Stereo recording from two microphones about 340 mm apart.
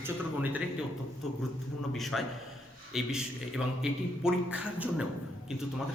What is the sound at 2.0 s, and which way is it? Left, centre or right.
A man's voice, centre.